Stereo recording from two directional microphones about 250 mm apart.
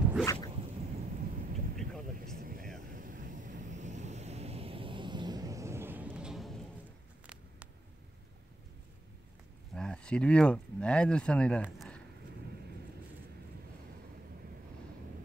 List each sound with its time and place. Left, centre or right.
0.2 s zipper: centre
0.5 s a sound: right
1.2 s vehicle: right; by 6.5 s centre
9.8 s speech: centre